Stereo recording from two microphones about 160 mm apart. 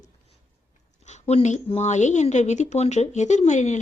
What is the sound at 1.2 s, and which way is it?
Speech, 45° left (ahead or behind).